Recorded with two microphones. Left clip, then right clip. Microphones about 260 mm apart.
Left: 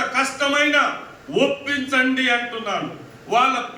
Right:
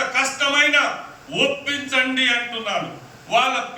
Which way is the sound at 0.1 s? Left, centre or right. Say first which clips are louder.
Even; centre.